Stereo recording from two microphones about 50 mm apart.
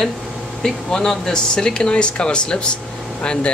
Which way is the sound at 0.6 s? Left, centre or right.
Centre.